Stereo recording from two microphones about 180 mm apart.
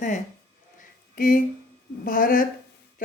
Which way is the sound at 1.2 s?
50° left (ahead or behind).